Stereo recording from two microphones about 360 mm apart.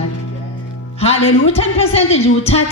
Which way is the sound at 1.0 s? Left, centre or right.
Centre.